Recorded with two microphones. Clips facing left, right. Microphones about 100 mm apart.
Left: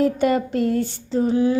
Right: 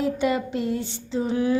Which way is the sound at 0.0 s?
45° left (ahead or behind).